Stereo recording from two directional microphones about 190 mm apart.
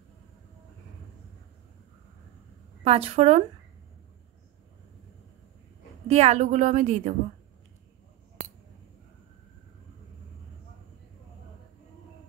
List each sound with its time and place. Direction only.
2.8 s a woman's voice: 30° right (ahead or behind)
6.0 s a woman's voice: 35° right (ahead or behind)